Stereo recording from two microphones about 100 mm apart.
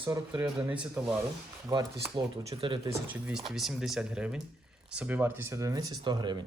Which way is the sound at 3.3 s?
5° right (ahead or behind).